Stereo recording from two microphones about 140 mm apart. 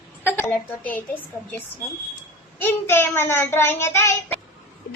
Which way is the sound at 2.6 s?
15° left (ahead or behind).